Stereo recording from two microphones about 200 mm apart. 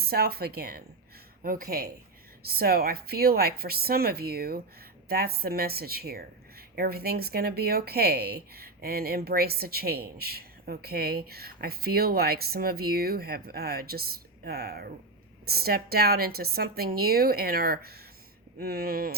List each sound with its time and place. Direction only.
0.0 s speech: 50° right (ahead or behind)